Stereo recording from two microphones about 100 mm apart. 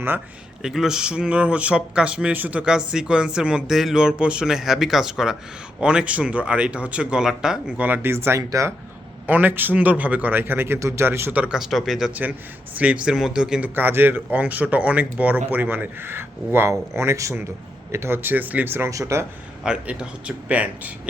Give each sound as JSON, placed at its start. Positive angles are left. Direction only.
{"t": 0.6, "sound": "speech", "side_deg": -5}
{"t": 8.4, "sound": "speech", "side_deg": -35}
{"t": 9.2, "sound": "speech", "side_deg": -15}
{"t": 13.7, "sound": "speech", "side_deg": -20}
{"t": 18.9, "sound": "speech", "side_deg": -30}
{"t": 19.6, "sound": "speech", "side_deg": -10}